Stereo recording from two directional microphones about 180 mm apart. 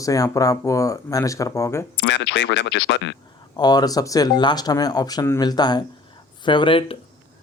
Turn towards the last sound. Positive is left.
turn(degrees=30)  # may be behind; listen again after turning